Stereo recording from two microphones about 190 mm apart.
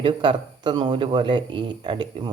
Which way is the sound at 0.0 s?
25° right (ahead or behind).